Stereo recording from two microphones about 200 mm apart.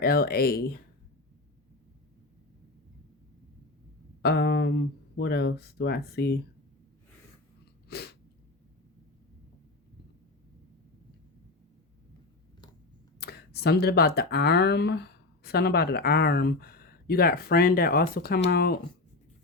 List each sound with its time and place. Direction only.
0.0 s speech: 50° left (ahead or behind)
4.2 s speech: 55° left (ahead or behind)
7.9 s sneeze: 55° left (ahead or behind)
13.1 s speech: 55° left (ahead or behind)